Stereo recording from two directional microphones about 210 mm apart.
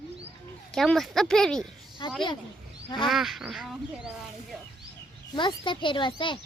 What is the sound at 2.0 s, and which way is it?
Speech, 20° left (ahead or behind).